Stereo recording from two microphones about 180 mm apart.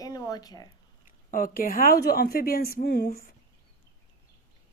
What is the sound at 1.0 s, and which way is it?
A woman's voice, 50° left (ahead or behind).